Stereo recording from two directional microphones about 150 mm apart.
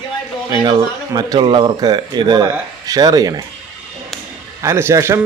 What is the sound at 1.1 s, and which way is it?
Speech, 30° right (ahead or behind).